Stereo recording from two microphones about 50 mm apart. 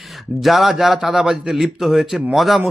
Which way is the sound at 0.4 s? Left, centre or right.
Centre.